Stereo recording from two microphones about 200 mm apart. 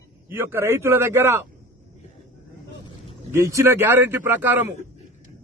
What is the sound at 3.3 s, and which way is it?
A man's voice, 15° right (ahead or behind).